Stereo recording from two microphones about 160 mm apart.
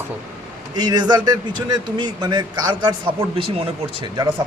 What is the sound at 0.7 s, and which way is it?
A man's voice, 25° right (ahead or behind).